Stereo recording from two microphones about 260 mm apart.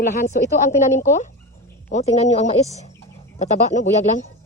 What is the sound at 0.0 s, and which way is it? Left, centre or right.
A woman's voice, left.